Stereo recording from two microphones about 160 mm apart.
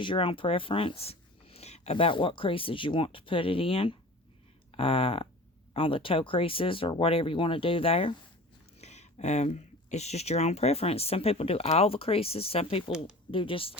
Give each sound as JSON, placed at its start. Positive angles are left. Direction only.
{"t": 0.0, "sound": "speech", "side_deg": 30}